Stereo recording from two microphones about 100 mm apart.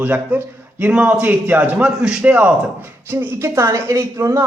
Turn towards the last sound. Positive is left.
turn(degrees=-30)  # may be behind; listen again after turning